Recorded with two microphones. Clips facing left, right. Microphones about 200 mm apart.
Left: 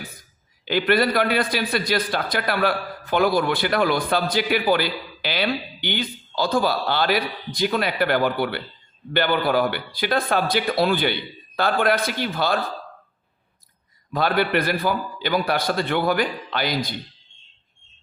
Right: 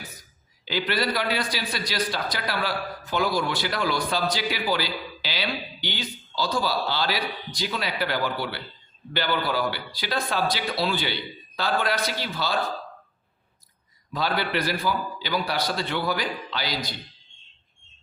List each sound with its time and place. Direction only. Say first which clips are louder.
0.2 s a man's voice: even; 55° left (ahead or behind)
14.1 s a man's voice: left 5 dB; 55° left (ahead or behind)